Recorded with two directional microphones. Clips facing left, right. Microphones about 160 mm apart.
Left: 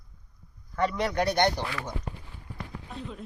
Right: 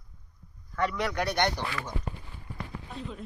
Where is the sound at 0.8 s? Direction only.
30° left (ahead or behind).